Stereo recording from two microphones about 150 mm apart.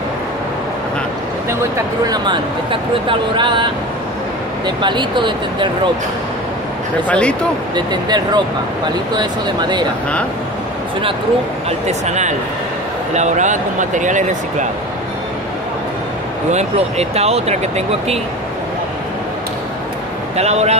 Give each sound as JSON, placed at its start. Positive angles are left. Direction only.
{"t": 2.0, "sound": "speech", "side_deg": -30}
{"t": 4.6, "sound": "speech", "side_deg": -30}
{"t": 7.1, "sound": "speech", "side_deg": 5}
{"t": 7.7, "sound": "speech", "side_deg": -30}
{"t": 12.1, "sound": "speech", "side_deg": -50}
{"t": 16.5, "sound": "speech", "side_deg": -45}
{"t": 20.3, "sound": "speech", "side_deg": -45}